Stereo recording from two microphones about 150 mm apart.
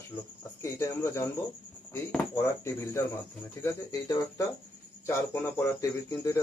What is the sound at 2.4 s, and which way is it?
Speech, 15° left (ahead or behind).